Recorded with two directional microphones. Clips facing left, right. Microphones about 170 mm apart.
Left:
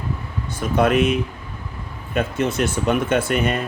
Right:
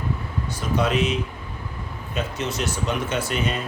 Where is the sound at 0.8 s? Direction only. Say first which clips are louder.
Left 6 dB; 55° left (ahead or behind).